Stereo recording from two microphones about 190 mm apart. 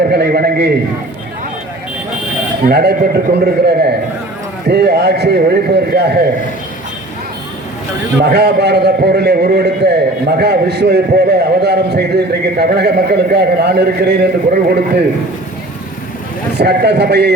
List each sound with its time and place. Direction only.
0.1 s a man's voice: 55° right (ahead or behind)
2.6 s a man's voice: 55° right (ahead or behind)
8.2 s a man's voice: 60° right (ahead or behind)
16.6 s a man's voice: 60° right (ahead or behind)